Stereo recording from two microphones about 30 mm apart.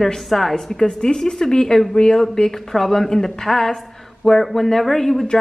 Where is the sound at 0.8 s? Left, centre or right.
Centre.